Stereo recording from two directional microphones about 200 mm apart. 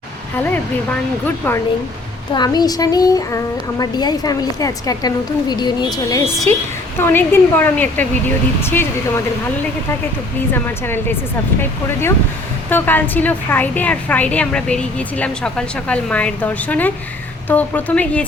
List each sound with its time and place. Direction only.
2.3 s a woman's voice: 20° left (ahead or behind)
10.5 s a woman's voice: 10° left (ahead or behind)
12.7 s a woman's voice: 10° left (ahead or behind)